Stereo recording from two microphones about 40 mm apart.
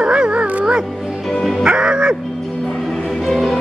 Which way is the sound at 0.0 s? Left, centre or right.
Right.